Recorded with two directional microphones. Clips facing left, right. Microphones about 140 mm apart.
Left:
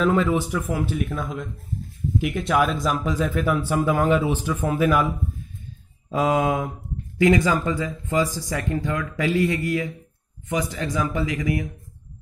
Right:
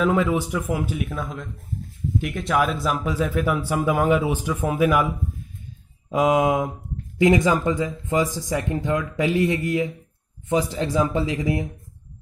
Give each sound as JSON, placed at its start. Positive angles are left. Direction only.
{"t": 0.0, "sound": "speech", "side_deg": -10}